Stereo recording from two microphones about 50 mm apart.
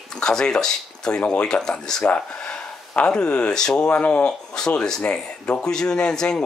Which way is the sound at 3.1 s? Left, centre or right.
Centre.